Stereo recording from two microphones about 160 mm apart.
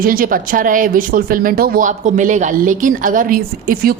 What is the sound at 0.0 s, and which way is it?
Speech, 65° right (ahead or behind).